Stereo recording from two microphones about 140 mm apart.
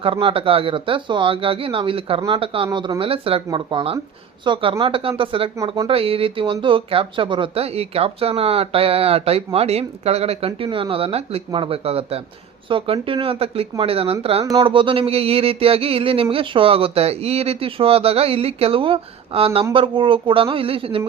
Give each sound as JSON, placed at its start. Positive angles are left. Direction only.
{"t": 0.0, "sound": "speech", "side_deg": -40}